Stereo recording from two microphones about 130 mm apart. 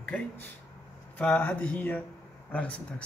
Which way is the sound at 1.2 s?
10° left (ahead or behind).